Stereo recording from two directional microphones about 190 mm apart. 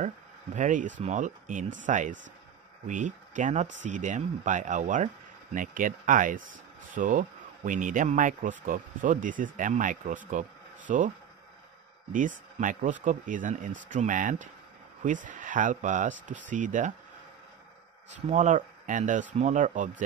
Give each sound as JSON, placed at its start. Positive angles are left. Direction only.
{"t": 0.6, "sound": "speech", "side_deg": -40}
{"t": 12.1, "sound": "speech", "side_deg": -45}
{"t": 18.3, "sound": "speech", "side_deg": -40}